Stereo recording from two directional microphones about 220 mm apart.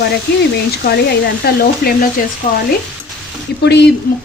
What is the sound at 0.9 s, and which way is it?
Stir, 45° left (ahead or behind).